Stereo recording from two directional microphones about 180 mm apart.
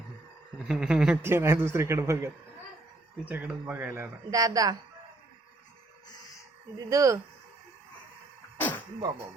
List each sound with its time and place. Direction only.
0.7 s a man's voice: 5° right (ahead or behind); by 4.8 s 20° right (ahead or behind)
6.9 s a man's voice: 15° right (ahead or behind)
8.5 s a sound: 10° left (ahead or behind)